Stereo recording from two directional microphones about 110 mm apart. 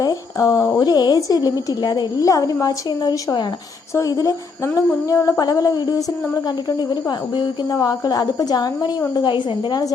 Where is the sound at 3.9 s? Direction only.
30° left (ahead or behind).